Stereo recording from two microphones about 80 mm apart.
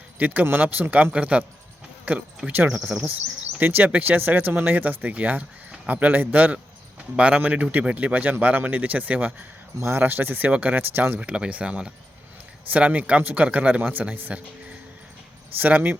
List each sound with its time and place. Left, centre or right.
0.2 s speech: right
3.6 s speech: right
9.8 s speech: right
11.2 s speech: centre
15.5 s speech: right